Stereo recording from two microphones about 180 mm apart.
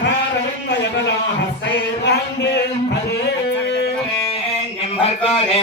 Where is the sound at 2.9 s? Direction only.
70° left (ahead or behind).